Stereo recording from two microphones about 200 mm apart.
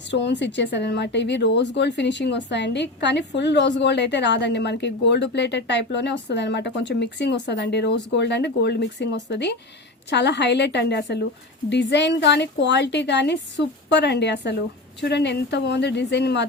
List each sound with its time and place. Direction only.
0.1 s speech: 60° left (ahead or behind)